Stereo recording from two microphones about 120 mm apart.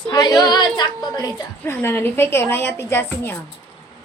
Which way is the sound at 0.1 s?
35° left (ahead or behind).